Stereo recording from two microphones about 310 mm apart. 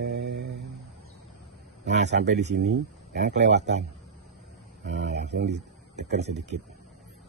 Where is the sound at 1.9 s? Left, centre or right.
Right.